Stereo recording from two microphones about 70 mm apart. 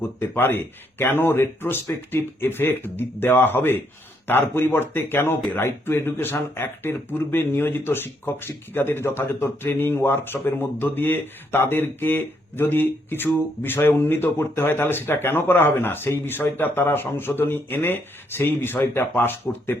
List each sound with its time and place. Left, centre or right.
0.2 s speech: left